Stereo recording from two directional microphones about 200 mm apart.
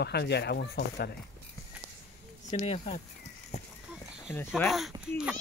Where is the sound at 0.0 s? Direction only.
55° left (ahead or behind).